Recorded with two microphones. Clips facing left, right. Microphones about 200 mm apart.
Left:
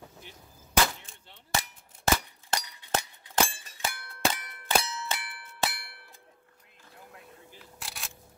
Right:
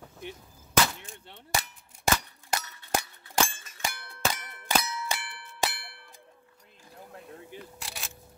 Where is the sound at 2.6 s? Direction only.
15° left (ahead or behind).